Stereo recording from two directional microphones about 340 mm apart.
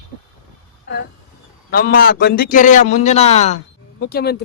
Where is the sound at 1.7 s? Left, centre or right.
Left.